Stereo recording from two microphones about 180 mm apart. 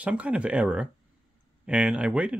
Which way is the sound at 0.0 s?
5° right (ahead or behind).